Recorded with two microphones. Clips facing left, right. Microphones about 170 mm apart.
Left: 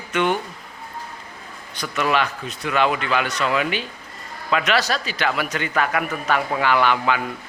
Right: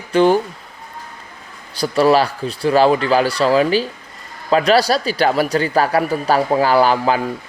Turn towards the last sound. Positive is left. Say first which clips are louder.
# right 5 dB
turn(degrees=-35)  # may be behind; listen again after turning